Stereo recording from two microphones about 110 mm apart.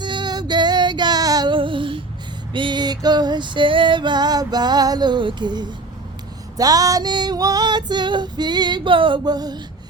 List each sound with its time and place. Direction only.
0.0 s female singing: 40° right (ahead or behind)
1.5 s female singing: 50° right (ahead or behind)
2.5 s music: 45° right (ahead or behind)